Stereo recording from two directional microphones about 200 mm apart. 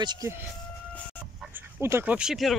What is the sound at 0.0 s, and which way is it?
Speech, 20° right (ahead or behind).